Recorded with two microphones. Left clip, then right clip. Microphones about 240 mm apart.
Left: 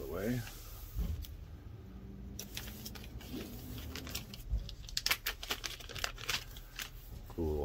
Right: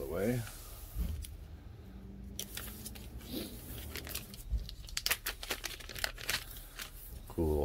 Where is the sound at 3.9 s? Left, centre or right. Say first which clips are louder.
Right 1 dB; centre.